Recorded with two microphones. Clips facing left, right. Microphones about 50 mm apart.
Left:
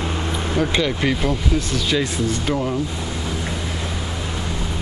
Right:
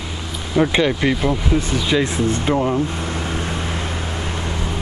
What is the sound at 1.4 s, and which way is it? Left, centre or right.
Speech, right.